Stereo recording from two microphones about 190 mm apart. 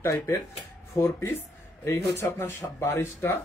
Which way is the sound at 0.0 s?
15° left (ahead or behind).